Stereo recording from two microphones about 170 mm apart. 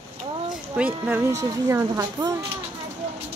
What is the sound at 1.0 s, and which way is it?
Speech, 10° right (ahead or behind).